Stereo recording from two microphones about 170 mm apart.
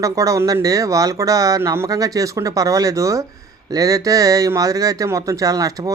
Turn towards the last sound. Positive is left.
turn(degrees=-20)  # may be behind; listen again after turning